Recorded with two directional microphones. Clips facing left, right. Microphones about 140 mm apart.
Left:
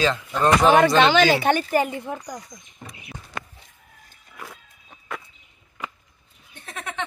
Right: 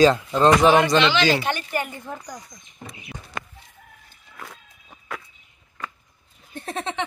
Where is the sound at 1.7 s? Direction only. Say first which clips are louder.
Left 6 dB; 35° left (ahead or behind).